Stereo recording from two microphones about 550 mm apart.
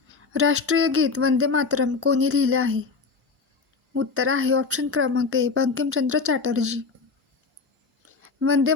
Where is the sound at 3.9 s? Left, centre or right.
Right.